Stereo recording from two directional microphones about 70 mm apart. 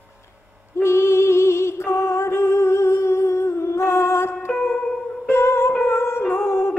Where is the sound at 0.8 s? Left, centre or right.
Left.